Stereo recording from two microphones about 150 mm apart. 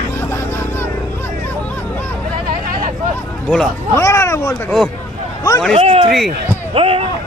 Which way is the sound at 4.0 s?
20° left (ahead or behind).